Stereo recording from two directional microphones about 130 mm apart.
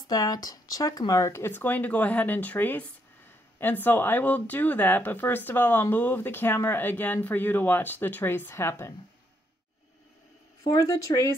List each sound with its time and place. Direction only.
0.1 s speech: 30° left (ahead or behind)
10.6 s speech: 25° left (ahead or behind)